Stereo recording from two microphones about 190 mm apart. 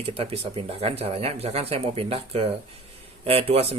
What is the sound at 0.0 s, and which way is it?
Speech, 30° right (ahead or behind).